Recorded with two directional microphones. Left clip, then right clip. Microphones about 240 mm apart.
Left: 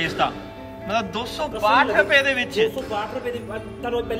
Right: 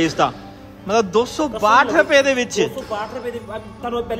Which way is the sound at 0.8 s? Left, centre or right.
Right.